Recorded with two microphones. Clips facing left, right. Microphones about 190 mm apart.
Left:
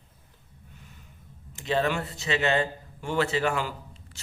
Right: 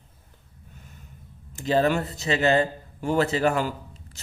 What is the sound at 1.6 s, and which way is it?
A man's voice, 35° right (ahead or behind).